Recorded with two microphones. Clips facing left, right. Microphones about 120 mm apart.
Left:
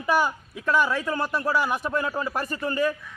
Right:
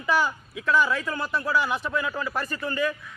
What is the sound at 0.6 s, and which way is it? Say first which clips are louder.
Speech: even; 20° left (ahead or behind).